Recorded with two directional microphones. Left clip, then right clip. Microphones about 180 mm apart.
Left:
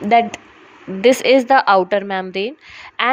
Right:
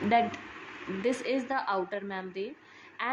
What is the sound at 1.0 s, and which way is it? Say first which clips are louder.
A woman's voice: left 19 dB; 50° left (ahead or behind).